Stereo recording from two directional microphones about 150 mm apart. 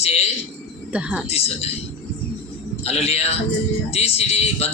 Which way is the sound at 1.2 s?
45° left (ahead or behind).